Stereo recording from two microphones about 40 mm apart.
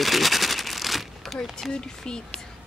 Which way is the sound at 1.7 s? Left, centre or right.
Left.